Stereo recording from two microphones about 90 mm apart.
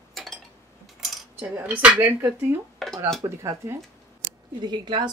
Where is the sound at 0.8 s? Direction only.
Centre (ahead or behind).